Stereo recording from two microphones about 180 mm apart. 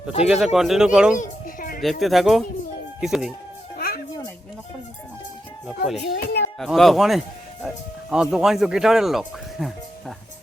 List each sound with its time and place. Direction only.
0.3 s speech: centre (ahead or behind)
1.1 s children playing: 45° left (ahead or behind)
1.8 s speech: centre (ahead or behind)
3.8 s music: 55° left (ahead or behind)
6.1 s a sound: 60° left (ahead or behind)
6.6 s speech: centre (ahead or behind)